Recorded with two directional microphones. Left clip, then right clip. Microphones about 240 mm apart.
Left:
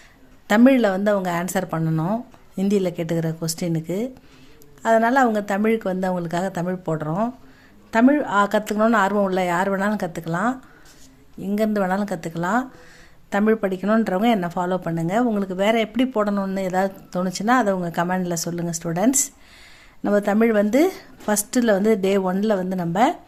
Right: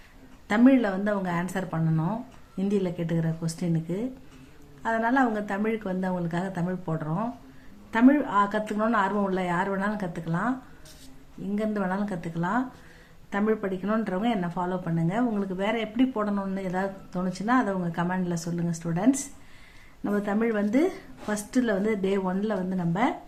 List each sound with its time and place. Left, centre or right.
0.4 s speech: left
11.5 s speech: left